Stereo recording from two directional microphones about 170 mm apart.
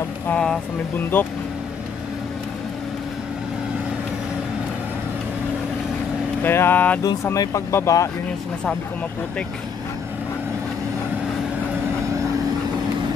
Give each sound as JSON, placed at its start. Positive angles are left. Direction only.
{"t": 0.3, "sound": "speech", "side_deg": 5}
{"t": 6.4, "sound": "speech", "side_deg": 15}